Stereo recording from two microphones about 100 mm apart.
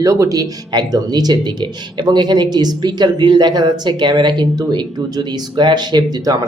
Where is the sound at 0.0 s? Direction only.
35° right (ahead or behind).